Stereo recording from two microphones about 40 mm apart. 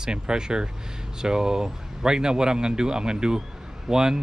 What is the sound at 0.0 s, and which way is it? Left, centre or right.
Speech, centre.